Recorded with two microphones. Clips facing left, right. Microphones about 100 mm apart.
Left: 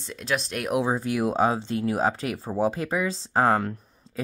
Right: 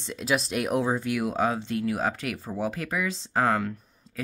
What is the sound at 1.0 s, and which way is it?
Speech, 30° left (ahead or behind).